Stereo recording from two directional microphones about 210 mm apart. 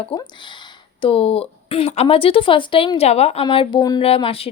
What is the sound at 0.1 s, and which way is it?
Speech, 25° left (ahead or behind).